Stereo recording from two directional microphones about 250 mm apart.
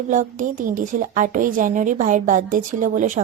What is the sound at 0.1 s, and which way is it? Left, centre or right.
A woman's voice, right.